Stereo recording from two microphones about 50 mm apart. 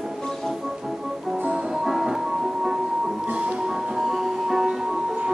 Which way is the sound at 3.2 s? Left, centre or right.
Right.